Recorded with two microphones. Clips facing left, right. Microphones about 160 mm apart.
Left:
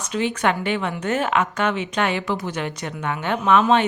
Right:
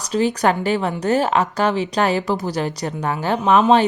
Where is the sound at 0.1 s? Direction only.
35° right (ahead or behind).